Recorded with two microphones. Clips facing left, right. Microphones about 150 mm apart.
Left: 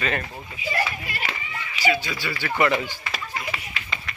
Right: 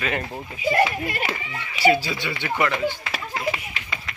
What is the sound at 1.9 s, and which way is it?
Speech, 35° right (ahead or behind).